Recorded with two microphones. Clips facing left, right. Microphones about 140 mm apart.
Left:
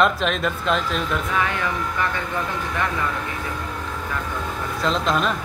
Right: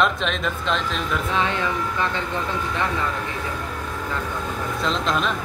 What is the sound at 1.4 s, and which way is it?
Speech, 20° right (ahead or behind).